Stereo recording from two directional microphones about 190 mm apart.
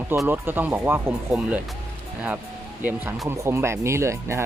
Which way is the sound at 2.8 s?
10° right (ahead or behind).